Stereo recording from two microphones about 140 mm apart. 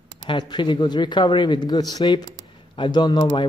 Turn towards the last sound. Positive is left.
turn(degrees=35)  # may be behind; listen again after turning